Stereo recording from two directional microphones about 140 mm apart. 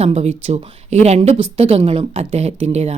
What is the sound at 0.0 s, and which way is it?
Speech, 50° right (ahead or behind).